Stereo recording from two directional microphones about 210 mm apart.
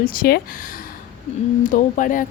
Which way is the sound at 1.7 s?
40° left (ahead or behind).